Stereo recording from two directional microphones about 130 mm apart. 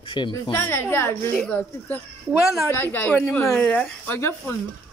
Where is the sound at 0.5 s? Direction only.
20° left (ahead or behind).